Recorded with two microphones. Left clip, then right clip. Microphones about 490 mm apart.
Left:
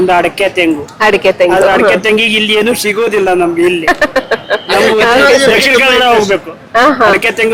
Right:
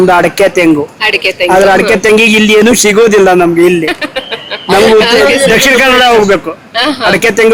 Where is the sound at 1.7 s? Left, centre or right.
Right.